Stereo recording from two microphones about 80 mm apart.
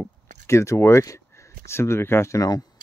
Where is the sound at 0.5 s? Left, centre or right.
Left.